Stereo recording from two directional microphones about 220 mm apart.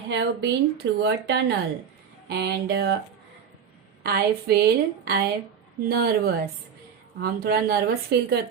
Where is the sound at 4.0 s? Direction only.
45° right (ahead or behind).